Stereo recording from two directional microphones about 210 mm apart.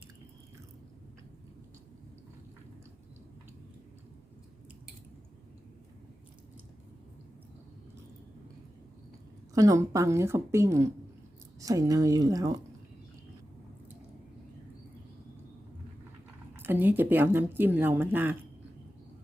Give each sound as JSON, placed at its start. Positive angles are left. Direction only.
{"t": 9.6, "sound": "speech", "side_deg": -15}
{"t": 16.6, "sound": "speech", "side_deg": -10}